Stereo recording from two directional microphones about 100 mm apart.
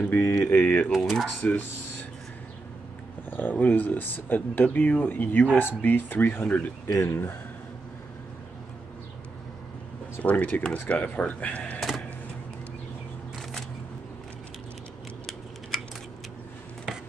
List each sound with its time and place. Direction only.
0.0 s speech: 25° left (ahead or behind)
0.9 s speech: centre (ahead or behind)
1.4 s speech: 15° left (ahead or behind)
3.3 s speech: 20° left (ahead or behind)
6.9 s speech: 25° left (ahead or behind)
10.1 s speech: 15° left (ahead or behind)
13.4 s single-lens reflex camera: 5° left (ahead or behind)